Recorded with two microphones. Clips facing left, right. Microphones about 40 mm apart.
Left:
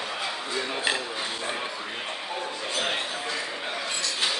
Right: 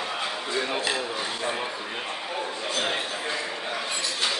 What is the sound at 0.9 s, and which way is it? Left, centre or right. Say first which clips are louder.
Speech: right 1 dB; centre.